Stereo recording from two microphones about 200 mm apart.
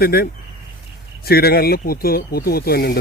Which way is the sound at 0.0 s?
50° left (ahead or behind).